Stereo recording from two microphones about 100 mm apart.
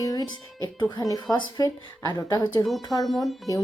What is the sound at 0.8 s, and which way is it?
Speech, 45° left (ahead or behind).